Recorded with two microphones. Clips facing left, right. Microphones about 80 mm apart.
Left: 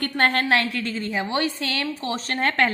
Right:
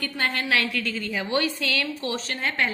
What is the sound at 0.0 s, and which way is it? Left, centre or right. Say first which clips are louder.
A woman's voice: left 6 dB; left.